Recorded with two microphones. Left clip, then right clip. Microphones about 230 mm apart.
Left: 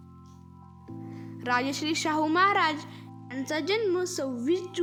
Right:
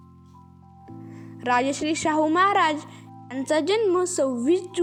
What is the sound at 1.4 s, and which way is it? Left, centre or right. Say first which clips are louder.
A woman's voice: right 5 dB; centre.